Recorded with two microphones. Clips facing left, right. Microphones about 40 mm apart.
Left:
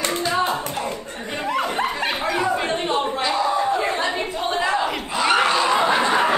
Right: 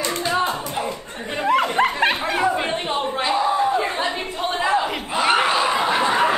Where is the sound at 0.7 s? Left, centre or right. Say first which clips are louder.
Right 1 dB; centre.